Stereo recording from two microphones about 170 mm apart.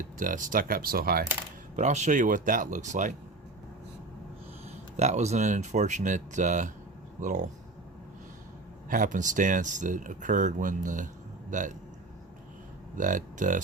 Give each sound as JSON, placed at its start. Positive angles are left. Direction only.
{"t": 0.2, "sound": "speech", "side_deg": -50}
{"t": 1.7, "sound": "speech", "side_deg": -45}
{"t": 4.9, "sound": "speech", "side_deg": -40}
{"t": 8.9, "sound": "speech", "side_deg": -50}
{"t": 13.0, "sound": "speech", "side_deg": -50}